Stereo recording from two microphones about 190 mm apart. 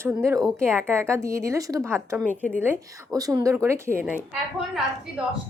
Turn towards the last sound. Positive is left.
turn(degrees=-5)  # may be behind; listen again after turning